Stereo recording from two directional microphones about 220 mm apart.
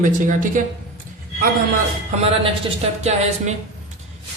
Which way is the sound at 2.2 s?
25° right (ahead or behind).